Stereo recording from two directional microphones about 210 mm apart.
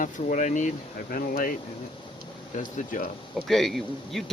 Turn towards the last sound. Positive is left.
turn(degrees=0)  # may be behind; listen again after turning